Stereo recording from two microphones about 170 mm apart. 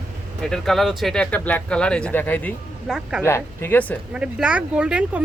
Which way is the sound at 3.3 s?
15° left (ahead or behind).